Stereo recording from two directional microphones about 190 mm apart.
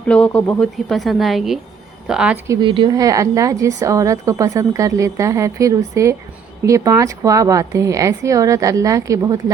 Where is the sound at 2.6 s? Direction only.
25° right (ahead or behind).